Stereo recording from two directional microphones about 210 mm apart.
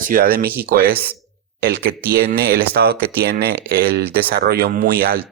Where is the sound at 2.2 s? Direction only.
50° right (ahead or behind).